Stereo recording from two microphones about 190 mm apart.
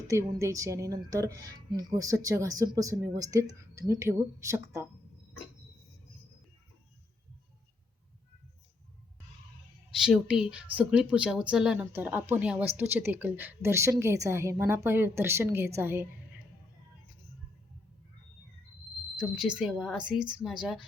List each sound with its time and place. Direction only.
0.1 s speech: 15° right (ahead or behind)
10.0 s speech: centre (ahead or behind)
19.1 s speech: 5° right (ahead or behind)